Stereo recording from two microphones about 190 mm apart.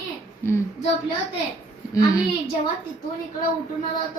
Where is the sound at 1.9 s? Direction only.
20° left (ahead or behind).